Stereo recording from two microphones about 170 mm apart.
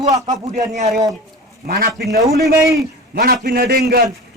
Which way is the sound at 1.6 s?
65° right (ahead or behind).